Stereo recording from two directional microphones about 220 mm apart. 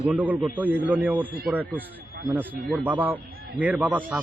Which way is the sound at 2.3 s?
10° right (ahead or behind).